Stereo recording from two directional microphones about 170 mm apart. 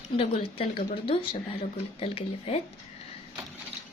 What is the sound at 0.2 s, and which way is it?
A woman's voice, 35° left (ahead or behind).